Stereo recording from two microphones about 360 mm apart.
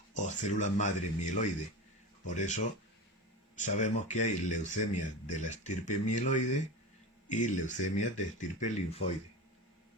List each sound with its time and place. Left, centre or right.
0.1 s speech: centre